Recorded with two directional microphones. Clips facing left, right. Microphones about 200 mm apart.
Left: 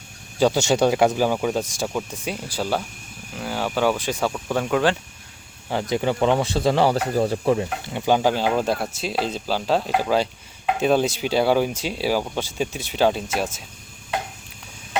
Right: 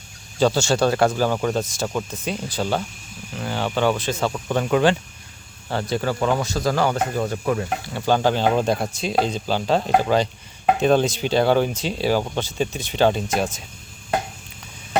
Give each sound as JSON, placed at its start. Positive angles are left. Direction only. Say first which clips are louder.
{"t": 0.3, "sound": "speech", "louder": "even", "side_deg": 15}
{"t": 4.3, "sound": "speech", "louder": "right 3 dB", "side_deg": 0}
{"t": 5.6, "sound": "speech", "louder": "left 1 dB", "side_deg": 15}